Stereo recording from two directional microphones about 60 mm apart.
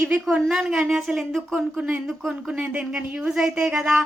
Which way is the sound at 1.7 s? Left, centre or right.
Right.